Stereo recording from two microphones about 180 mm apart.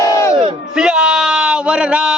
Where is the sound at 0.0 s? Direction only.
20° left (ahead or behind).